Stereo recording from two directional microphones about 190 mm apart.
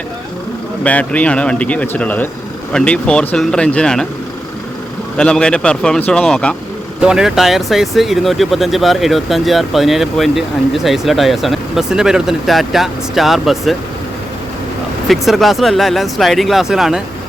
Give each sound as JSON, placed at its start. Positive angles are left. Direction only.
{"t": 0.9, "sound": "speech", "side_deg": 5}
{"t": 5.1, "sound": "speech", "side_deg": 5}
{"t": 15.0, "sound": "speech", "side_deg": 0}